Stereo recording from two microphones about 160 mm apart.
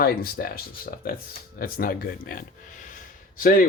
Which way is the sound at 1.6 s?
65° left (ahead or behind).